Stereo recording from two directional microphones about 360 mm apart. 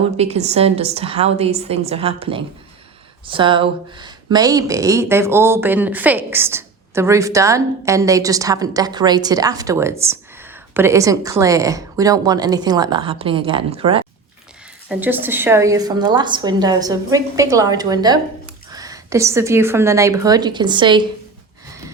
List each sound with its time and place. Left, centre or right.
0.2 s speech: centre